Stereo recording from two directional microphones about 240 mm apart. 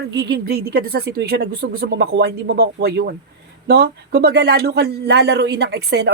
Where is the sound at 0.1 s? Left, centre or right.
Right.